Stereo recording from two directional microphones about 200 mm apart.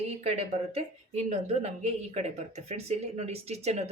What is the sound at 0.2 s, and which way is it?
Speech, 35° right (ahead or behind).